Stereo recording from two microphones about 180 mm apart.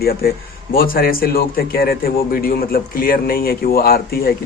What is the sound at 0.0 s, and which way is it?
A man's voice, 55° left (ahead or behind).